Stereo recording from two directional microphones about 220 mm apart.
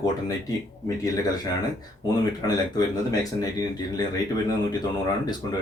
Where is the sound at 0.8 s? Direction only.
15° left (ahead or behind).